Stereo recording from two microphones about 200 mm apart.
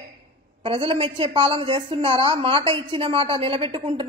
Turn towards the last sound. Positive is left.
turn(degrees=-25)  # may be behind; listen again after turning